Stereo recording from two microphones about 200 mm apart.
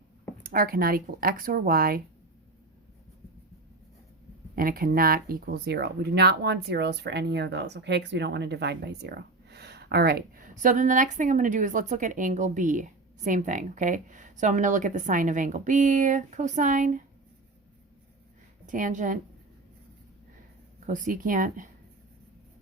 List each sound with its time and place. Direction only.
0.4 s speech: 45° right (ahead or behind)
4.5 s speech: 45° right (ahead or behind)
18.6 s a woman's voice: 40° right (ahead or behind)
20.8 s speech: 40° right (ahead or behind)